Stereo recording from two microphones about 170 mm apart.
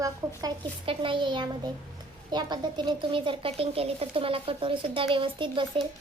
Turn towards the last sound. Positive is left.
turn(degrees=-30)  # may be behind; listen again after turning